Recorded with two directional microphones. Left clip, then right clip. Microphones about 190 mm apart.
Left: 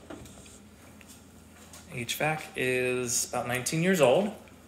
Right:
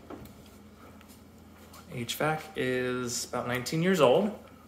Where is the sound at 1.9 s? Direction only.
20° right (ahead or behind).